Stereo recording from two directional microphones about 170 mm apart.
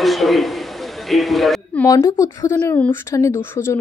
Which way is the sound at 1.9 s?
20° left (ahead or behind).